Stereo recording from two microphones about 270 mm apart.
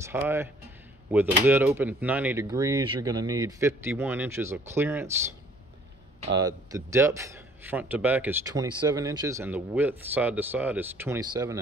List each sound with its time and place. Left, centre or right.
0.0 s a man's voice: centre
6.2 s a man's voice: centre